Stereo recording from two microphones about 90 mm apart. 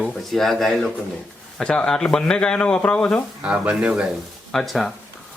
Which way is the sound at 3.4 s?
15° right (ahead or behind).